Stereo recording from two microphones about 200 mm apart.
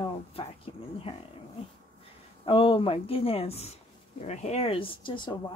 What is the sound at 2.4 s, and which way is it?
Speech, 25° left (ahead or behind).